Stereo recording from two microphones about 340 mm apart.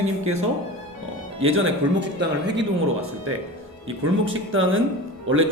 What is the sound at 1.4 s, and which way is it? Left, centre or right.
Speech, right.